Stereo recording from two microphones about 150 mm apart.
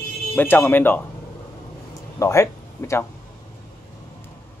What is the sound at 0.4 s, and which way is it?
Speech, 15° left (ahead or behind).